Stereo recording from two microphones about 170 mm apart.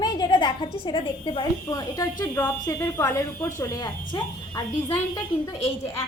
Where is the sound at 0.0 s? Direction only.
25° left (ahead or behind).